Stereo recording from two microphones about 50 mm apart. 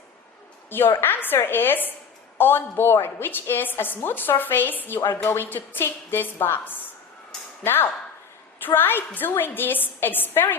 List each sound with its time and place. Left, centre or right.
0.7 s a woman's voice: left